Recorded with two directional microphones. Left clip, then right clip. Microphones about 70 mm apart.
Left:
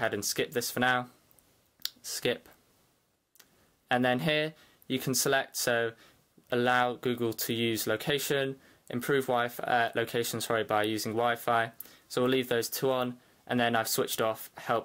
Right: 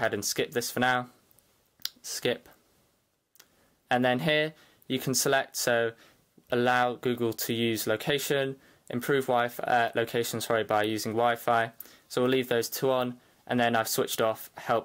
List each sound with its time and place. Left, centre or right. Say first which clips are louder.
0.0 s speech: right 2 dB; right
3.9 s speech: right 2 dB; right